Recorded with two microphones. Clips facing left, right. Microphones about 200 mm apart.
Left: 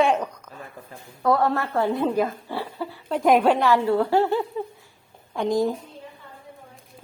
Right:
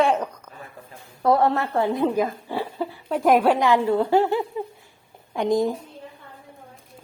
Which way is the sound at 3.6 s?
15° right (ahead or behind).